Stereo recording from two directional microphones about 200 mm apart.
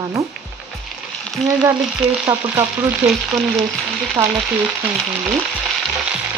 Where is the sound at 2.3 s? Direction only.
15° right (ahead or behind).